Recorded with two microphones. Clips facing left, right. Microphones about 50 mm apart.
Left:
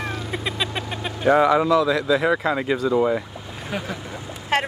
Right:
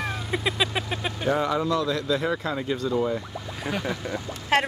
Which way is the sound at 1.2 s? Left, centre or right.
Left.